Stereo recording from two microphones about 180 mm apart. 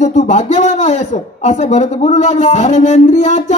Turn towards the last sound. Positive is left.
turn(degrees=40)  # may be behind; listen again after turning